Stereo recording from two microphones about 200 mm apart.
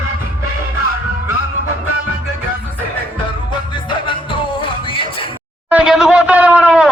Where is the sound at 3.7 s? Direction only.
25° left (ahead or behind).